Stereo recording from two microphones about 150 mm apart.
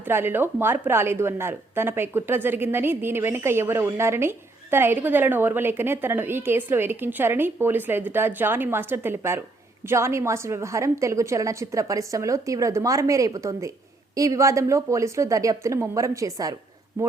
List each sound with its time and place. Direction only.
0.0 s a woman's voice: 15° right (ahead or behind)